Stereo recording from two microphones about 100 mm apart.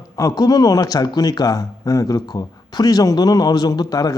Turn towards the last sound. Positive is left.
turn(degrees=40)  # may be behind; listen again after turning